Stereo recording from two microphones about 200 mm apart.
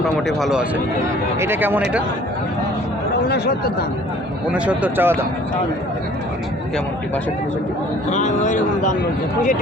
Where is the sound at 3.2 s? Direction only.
55° left (ahead or behind).